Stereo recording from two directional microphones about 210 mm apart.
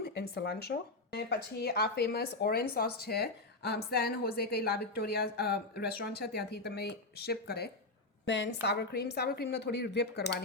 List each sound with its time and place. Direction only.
0.0 s speech: 50° left (ahead or behind)
8.2 s a woman's voice: 60° left (ahead or behind)